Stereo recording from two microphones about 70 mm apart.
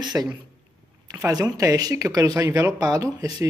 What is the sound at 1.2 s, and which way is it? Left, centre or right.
Speech, right.